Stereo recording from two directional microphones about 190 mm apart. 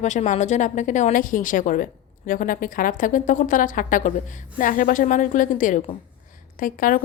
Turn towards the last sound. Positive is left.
turn(degrees=45)  # may be behind; listen again after turning